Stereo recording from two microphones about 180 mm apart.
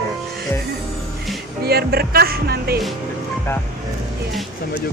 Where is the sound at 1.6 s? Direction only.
60° right (ahead or behind).